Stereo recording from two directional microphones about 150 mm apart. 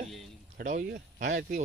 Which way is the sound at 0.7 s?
80° right.